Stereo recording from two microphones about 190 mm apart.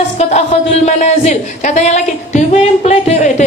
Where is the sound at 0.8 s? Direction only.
35° left (ahead or behind).